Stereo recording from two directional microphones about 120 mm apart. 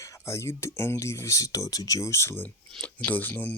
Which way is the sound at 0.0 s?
25° left (ahead or behind).